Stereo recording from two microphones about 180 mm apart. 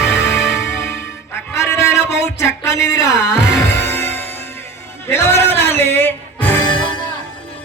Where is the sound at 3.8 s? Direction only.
10° left (ahead or behind).